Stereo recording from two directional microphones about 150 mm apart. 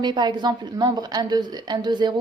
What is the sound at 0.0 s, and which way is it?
A woman's voice, 30° right (ahead or behind).